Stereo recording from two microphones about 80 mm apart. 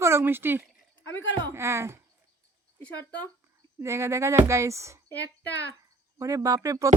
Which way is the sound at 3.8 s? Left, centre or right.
Right.